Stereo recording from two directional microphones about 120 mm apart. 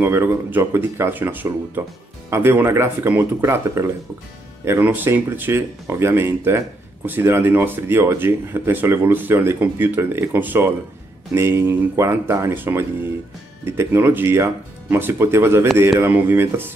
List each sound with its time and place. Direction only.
0.0 s speech: 20° right (ahead or behind)